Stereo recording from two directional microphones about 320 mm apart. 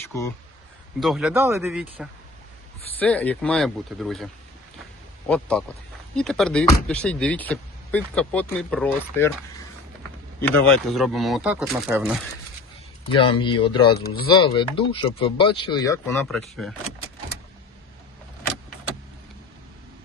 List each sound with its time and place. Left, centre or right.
0.9 s speech: centre
5.3 s speech: centre
10.4 s speech: centre
13.1 s speech: centre
13.9 s speech: left
14.4 s speech: centre